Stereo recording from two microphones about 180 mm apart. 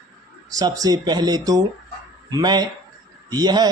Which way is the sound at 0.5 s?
20° right (ahead or behind).